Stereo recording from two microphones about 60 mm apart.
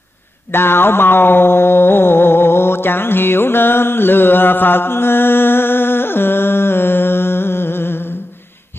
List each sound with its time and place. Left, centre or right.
0.5 s mantra: left